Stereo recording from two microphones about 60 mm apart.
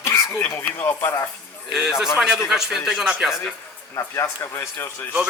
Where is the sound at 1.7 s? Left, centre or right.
Centre.